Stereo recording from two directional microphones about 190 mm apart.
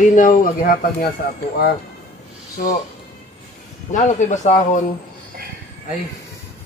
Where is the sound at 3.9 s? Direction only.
40° left (ahead or behind).